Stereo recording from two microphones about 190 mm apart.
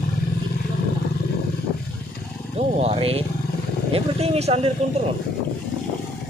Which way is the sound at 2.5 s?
30° right (ahead or behind).